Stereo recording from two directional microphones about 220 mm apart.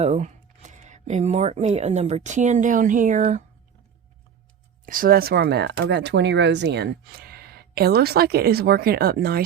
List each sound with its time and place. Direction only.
0.0 s speech: 30° right (ahead or behind)
4.9 s speech: 40° right (ahead or behind)